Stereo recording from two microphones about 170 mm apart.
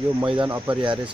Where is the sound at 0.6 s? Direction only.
30° right (ahead or behind).